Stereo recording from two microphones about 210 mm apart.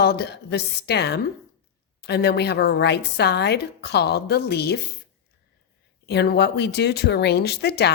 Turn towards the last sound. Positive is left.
turn(degrees=50)  # may be behind; listen again after turning